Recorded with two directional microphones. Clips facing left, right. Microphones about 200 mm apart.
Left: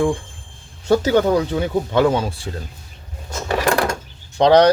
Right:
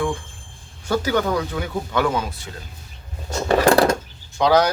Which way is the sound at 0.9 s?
30° left (ahead or behind).